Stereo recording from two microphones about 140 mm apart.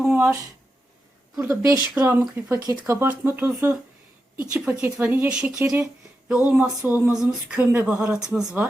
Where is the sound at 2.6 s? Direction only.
20° right (ahead or behind).